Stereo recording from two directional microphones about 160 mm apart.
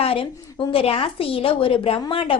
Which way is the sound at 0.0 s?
35° left (ahead or behind).